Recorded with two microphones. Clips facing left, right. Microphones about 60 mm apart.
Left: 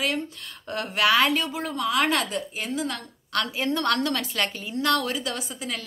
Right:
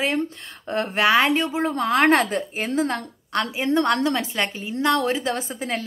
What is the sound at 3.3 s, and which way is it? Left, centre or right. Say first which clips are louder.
A woman's voice: right 3 dB; right.